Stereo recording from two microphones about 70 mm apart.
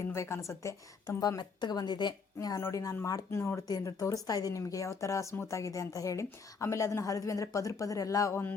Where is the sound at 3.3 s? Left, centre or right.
Left.